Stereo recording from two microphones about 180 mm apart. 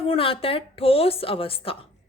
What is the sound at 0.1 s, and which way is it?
Speech, 30° left (ahead or behind).